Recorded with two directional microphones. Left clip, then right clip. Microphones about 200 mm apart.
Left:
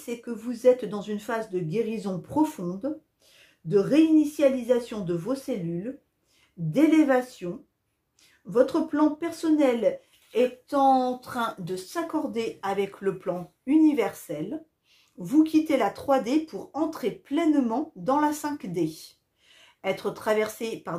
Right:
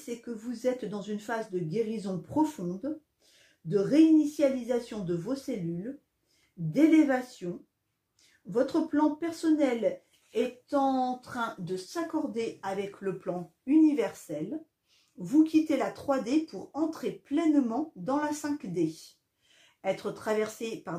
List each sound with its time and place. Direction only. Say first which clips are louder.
0.0 s speech: left 4 dB; 30° left (ahead or behind)
8.5 s speech: left 5 dB; 30° left (ahead or behind)